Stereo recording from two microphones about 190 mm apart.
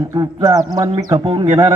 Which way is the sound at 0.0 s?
15° right (ahead or behind).